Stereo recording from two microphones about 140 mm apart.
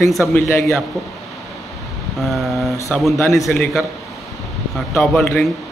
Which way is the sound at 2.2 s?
Centre (ahead or behind).